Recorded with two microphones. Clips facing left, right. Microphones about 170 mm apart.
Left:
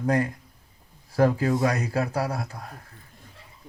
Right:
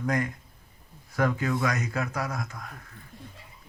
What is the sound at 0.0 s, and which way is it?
A man's voice, 30° left (ahead or behind).